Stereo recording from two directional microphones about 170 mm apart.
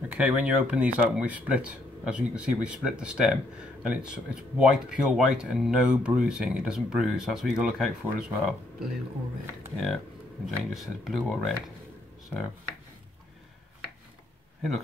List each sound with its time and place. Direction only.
0.1 s speech: 10° right (ahead or behind)
9.8 s speech: centre (ahead or behind)